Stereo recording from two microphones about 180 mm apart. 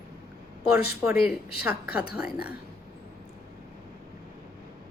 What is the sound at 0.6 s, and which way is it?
Speech, 60° left (ahead or behind).